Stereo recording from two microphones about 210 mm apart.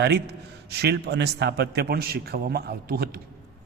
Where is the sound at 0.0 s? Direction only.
50° right (ahead or behind).